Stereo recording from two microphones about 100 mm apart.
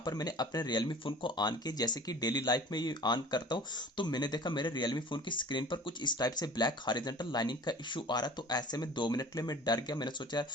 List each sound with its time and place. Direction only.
0.0 s speech: 40° left (ahead or behind)